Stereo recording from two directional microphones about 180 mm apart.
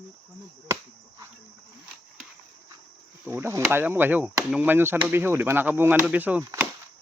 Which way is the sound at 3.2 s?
10° right (ahead or behind).